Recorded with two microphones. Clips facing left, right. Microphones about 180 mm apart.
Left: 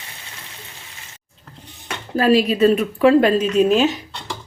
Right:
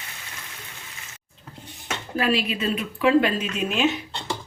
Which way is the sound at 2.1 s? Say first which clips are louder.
Left 9 dB; 40° left (ahead or behind).